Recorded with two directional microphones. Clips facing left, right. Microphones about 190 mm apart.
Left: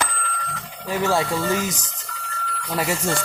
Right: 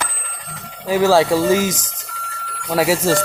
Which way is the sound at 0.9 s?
90° right.